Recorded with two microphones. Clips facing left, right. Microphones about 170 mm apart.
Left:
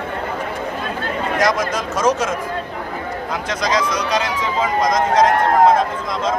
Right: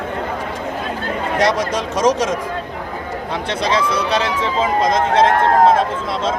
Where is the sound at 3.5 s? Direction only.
30° right (ahead or behind).